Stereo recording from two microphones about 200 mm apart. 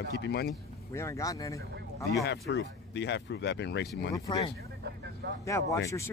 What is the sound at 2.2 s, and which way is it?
Speech, 60° left (ahead or behind).